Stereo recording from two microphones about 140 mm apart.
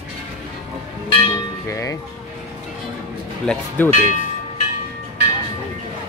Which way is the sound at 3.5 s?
15° left (ahead or behind).